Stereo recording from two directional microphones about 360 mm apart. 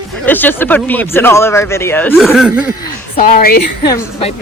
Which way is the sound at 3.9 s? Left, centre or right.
Centre.